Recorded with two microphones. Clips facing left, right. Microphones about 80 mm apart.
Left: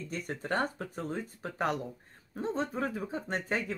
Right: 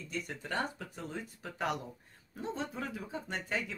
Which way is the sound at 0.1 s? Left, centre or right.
Left.